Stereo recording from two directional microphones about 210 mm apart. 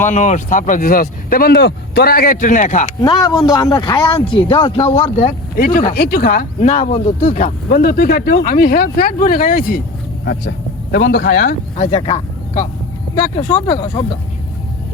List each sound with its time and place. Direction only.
0.1 s speech: 35° left (ahead or behind)
3.0 s speech: 20° left (ahead or behind)
5.5 s speech: 45° left (ahead or behind)
6.6 s speech: 30° left (ahead or behind)
7.8 s speech: 45° left (ahead or behind)
10.9 s speech: 55° left (ahead or behind)
11.8 s speech: 25° left (ahead or behind)
13.3 s speech: 25° left (ahead or behind)